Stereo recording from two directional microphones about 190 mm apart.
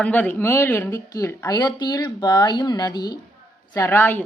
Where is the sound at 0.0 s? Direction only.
10° left (ahead or behind).